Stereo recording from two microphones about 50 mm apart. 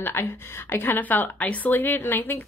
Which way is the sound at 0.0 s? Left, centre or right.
Left.